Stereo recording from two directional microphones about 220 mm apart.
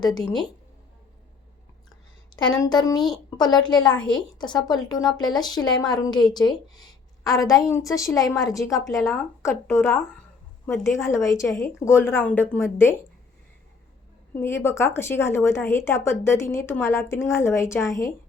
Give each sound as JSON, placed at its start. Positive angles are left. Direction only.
{"t": 2.5, "sound": "a woman's voice", "side_deg": 15}
{"t": 14.3, "sound": "a woman's voice", "side_deg": 10}